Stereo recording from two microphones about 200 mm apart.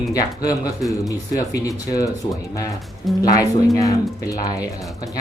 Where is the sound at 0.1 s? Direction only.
20° left (ahead or behind).